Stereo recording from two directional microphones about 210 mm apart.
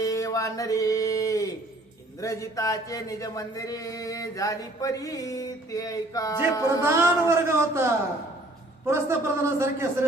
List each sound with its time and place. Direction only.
0.0 s a sound: 15° left (ahead or behind)
2.2 s speech: 15° left (ahead or behind)
6.7 s speech: 10° right (ahead or behind)
8.9 s speech: 15° right (ahead or behind)